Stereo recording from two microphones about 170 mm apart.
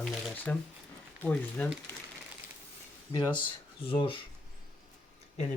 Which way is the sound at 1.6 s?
10° left (ahead or behind).